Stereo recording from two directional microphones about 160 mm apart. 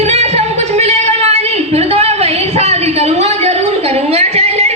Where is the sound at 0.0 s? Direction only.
45° right (ahead or behind).